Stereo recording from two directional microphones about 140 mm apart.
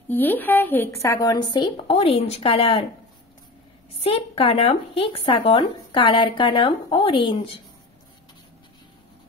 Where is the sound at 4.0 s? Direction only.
45° left (ahead or behind).